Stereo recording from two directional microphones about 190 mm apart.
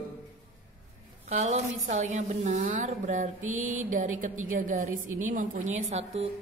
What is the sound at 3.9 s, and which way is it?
A woman's voice, 40° right (ahead or behind).